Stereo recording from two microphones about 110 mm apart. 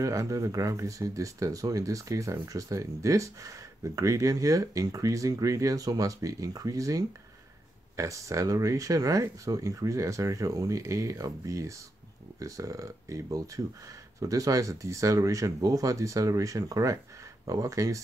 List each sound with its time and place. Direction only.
0.0 s speech: 30° right (ahead or behind)